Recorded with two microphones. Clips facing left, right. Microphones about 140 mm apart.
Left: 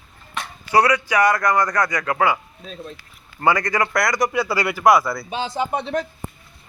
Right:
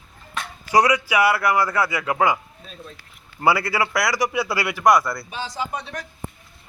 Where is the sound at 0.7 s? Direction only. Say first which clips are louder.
Left 1 dB; 10° right (ahead or behind).